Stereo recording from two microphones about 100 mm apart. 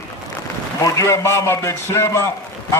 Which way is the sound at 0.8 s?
30° left (ahead or behind).